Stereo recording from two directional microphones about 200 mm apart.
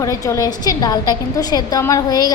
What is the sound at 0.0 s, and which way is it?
A woman's voice, 15° left (ahead or behind).